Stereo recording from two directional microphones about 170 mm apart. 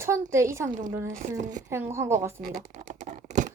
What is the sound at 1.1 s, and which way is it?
Speech, 45° right (ahead or behind).